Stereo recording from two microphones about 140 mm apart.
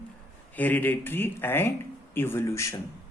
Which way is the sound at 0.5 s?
10° left (ahead or behind).